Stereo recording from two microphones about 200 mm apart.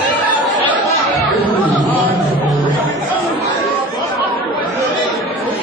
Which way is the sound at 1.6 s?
10° right (ahead or behind).